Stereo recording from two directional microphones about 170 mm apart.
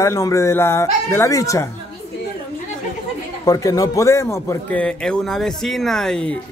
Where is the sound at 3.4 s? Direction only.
20° left (ahead or behind).